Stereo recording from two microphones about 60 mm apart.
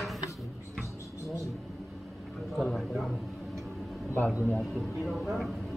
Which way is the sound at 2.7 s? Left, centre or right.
Centre.